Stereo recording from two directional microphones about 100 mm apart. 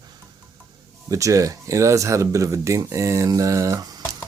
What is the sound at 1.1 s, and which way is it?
Speech, 35° right (ahead or behind).